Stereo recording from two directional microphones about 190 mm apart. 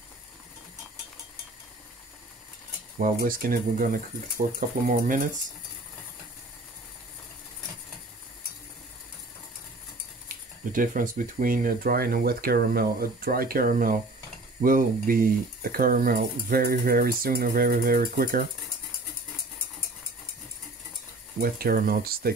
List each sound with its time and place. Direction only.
3.0 s speech: 50° right (ahead or behind)
10.2 s speech: 45° right (ahead or behind)
21.4 s speech: 50° right (ahead or behind)